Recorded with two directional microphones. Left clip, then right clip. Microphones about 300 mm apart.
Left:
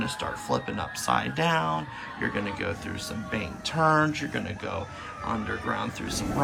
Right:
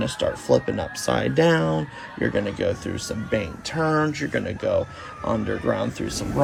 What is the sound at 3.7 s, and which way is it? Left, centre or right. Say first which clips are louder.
Speech: even; left.